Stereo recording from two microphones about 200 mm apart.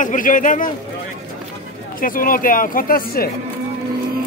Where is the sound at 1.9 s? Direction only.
45° left (ahead or behind).